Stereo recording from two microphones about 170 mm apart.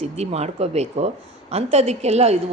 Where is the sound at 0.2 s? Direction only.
40° right (ahead or behind).